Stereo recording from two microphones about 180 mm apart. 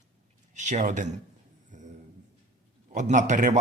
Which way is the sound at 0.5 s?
40° right (ahead or behind).